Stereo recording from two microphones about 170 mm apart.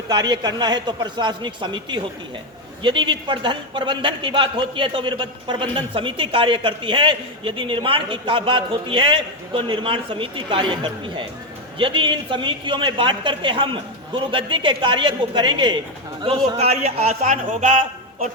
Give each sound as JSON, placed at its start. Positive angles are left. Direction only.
{"t": 0.1, "sound": "a man's voice", "side_deg": -25}